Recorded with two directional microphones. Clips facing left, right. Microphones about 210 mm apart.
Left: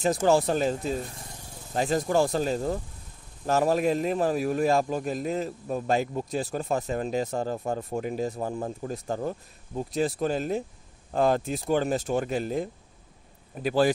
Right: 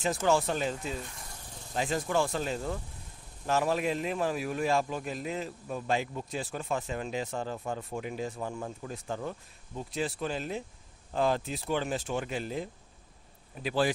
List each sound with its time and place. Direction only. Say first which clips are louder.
0.0 s a man's voice: left 5 dB; 40° left (ahead or behind)